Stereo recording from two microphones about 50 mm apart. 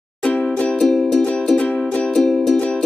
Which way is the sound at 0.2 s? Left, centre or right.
Left.